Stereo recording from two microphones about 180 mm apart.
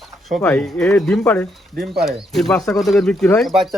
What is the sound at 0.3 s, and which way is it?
Speech, 5° left (ahead or behind).